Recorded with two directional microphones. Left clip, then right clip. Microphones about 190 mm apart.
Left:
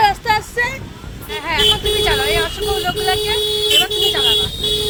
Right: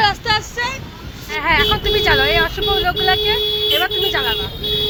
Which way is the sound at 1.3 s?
10° left (ahead or behind).